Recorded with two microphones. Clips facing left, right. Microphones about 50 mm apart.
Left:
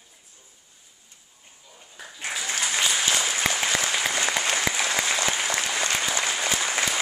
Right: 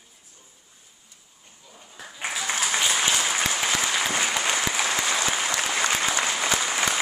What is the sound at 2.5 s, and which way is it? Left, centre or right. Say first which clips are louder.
Applause: even; centre.